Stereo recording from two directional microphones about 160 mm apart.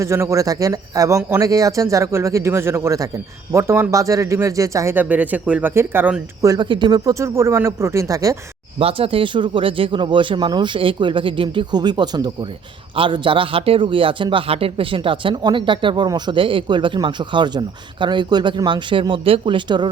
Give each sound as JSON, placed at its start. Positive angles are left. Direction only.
{"t": 0.0, "sound": "speech", "side_deg": -15}
{"t": 6.4, "sound": "speech", "side_deg": -25}
{"t": 8.8, "sound": "speech", "side_deg": -35}